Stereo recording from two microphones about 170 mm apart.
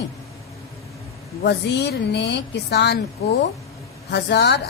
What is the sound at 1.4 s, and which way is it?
A woman's voice, 80° left.